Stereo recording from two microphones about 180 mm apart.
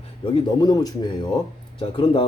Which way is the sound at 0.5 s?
20° left (ahead or behind).